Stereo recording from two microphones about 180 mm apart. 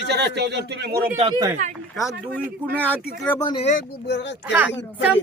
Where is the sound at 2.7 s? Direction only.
10° left (ahead or behind).